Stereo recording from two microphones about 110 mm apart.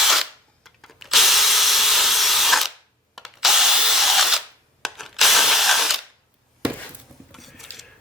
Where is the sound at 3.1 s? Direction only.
Centre (ahead or behind).